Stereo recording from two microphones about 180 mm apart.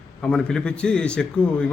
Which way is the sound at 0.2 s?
5° left (ahead or behind).